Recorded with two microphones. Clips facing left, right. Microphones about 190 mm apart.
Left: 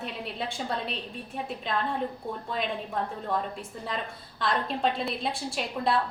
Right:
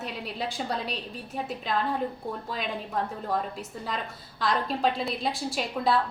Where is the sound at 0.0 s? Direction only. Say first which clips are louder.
Right 1 dB; centre (ahead or behind).